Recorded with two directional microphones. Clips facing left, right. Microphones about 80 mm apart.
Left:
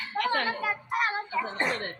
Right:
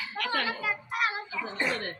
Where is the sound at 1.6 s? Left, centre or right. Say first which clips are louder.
Right 2 dB; left.